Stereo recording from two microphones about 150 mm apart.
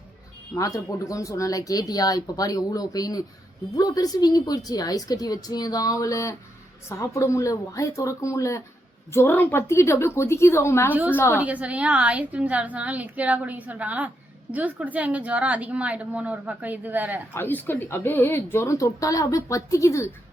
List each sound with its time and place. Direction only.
0.5 s speech: 25° left (ahead or behind)
11.3 s a woman's voice: 10° right (ahead or behind)
17.3 s speech: 15° left (ahead or behind)